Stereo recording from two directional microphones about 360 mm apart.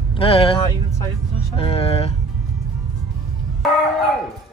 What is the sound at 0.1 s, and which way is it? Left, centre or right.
Speech, centre.